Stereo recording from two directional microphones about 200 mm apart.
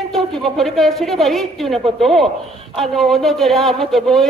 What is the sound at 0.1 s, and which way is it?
Speech, centre (ahead or behind).